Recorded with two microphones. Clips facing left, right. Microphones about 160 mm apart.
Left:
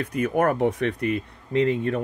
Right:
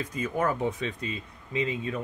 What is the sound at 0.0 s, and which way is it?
Speech, 65° left (ahead or behind).